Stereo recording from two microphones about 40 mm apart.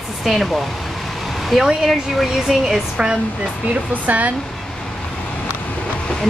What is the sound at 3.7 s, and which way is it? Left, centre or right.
Speech, right.